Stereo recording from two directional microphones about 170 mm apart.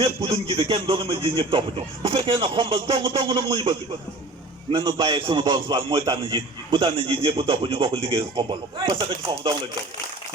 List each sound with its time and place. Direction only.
0.0 s a man's voice: 25° right (ahead or behind)